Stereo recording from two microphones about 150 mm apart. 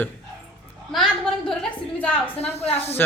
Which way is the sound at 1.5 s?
10° left (ahead or behind).